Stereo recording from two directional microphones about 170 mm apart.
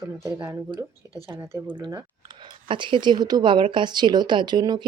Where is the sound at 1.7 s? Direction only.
25° right (ahead or behind).